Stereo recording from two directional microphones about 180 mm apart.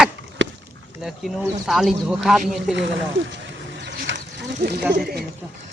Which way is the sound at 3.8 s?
75° right (ahead or behind).